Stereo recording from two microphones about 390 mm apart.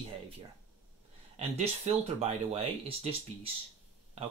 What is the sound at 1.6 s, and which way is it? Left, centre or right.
Speech, centre.